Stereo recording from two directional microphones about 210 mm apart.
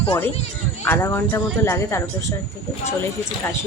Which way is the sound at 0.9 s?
10° left (ahead or behind).